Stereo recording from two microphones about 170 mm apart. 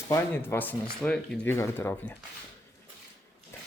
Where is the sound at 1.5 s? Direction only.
15° left (ahead or behind).